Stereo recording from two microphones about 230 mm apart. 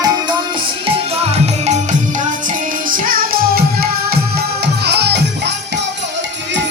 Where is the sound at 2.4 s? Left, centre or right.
Right.